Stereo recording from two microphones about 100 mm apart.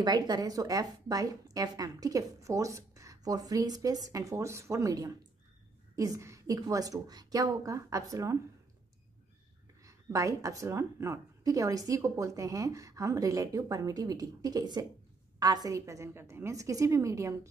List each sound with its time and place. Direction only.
0.0 s a woman's voice: 40° right (ahead or behind)
9.8 s a woman's voice: 35° right (ahead or behind)